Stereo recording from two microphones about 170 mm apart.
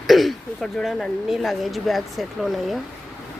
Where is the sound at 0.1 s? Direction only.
Centre (ahead or behind).